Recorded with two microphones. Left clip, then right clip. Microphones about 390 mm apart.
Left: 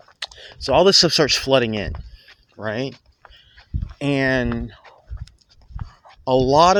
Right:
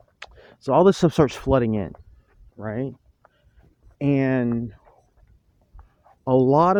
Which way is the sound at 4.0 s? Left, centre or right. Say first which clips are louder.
Left 2 dB; right.